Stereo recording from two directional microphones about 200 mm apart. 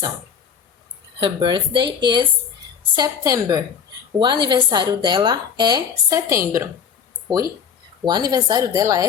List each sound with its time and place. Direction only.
1.2 s a woman's voice: 25° right (ahead or behind)
8.0 s speech: 20° right (ahead or behind)